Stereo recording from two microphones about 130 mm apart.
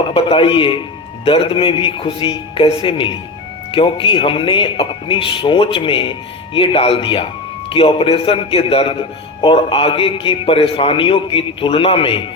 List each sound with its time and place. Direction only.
0.1 s a man's voice: 45° left (ahead or behind)